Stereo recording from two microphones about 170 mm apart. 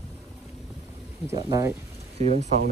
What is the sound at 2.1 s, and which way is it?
Speech, 40° right (ahead or behind).